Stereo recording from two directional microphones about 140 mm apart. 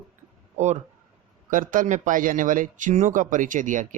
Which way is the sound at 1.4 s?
70° right (ahead or behind).